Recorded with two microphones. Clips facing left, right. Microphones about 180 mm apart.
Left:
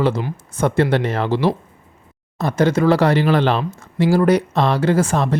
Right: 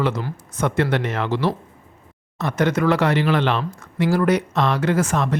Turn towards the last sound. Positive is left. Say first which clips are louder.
# left 3 dB
turn(degrees=30)  # may be behind; listen again after turning